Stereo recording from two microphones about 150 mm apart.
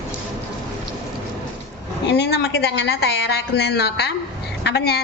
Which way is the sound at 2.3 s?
90° left.